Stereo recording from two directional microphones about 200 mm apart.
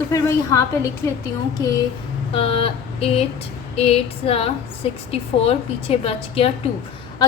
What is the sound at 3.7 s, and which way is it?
A woman's voice, 30° left (ahead or behind).